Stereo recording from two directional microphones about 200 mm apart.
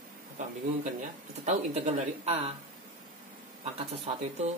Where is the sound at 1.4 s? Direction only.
35° right (ahead or behind).